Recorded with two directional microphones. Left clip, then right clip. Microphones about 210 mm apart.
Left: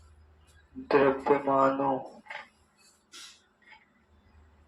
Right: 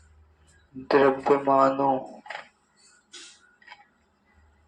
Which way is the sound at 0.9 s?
40° right (ahead or behind).